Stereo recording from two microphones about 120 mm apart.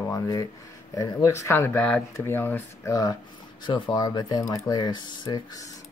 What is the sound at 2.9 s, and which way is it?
Speech, 30° left (ahead or behind).